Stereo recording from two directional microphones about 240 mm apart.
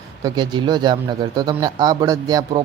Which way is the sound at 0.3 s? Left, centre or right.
Centre.